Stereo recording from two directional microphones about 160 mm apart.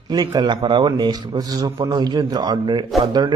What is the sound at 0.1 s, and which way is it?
Speech, 25° right (ahead or behind).